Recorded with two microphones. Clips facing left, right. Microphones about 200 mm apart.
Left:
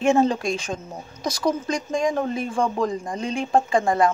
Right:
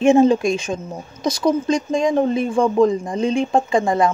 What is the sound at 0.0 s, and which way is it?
Speech, 20° right (ahead or behind).